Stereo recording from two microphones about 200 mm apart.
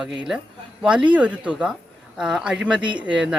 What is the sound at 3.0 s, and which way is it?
Speech, 5° right (ahead or behind).